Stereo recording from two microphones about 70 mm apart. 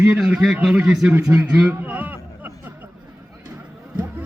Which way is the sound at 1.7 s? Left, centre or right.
Right.